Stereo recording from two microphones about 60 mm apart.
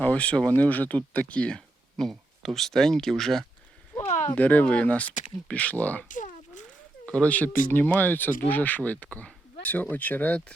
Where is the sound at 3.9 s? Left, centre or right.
Left.